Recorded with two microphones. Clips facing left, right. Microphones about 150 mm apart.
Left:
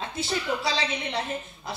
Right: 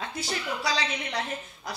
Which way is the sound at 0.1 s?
25° left (ahead or behind).